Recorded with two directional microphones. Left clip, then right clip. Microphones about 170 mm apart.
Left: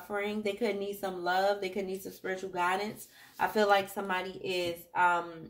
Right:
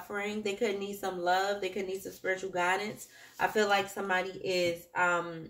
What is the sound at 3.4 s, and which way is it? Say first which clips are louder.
Speech: left 1 dB; 40° left (ahead or behind).